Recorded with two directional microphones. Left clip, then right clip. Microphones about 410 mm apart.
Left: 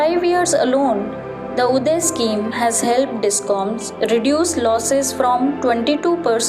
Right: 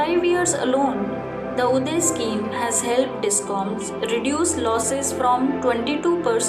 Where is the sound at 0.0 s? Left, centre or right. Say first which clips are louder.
Left 4 dB; centre.